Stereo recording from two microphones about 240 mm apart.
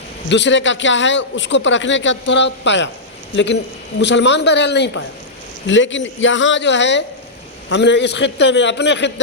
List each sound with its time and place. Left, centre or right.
0.3 s a man's voice: left